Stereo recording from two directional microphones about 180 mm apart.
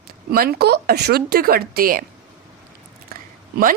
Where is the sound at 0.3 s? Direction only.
60° right (ahead or behind).